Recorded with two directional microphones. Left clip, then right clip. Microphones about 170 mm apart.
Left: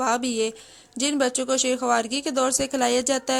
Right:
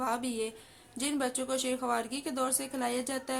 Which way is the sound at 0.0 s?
40° left (ahead or behind).